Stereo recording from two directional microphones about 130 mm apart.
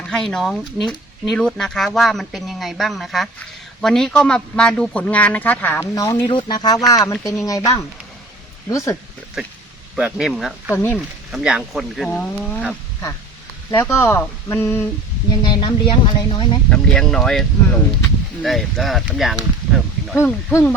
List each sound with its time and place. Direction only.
0.1 s a man's voice: 5° left (ahead or behind); by 9.0 s 25° left (ahead or behind)
9.4 s speech: centre (ahead or behind)
10.8 s a man's voice: 15° left (ahead or behind)
11.3 s speech: 5° right (ahead or behind)
13.7 s speech: 20° left (ahead or behind)
15.4 s speech: 40° left (ahead or behind)
16.6 s speech: 5° left (ahead or behind)
20.1 s speech: 20° left (ahead or behind)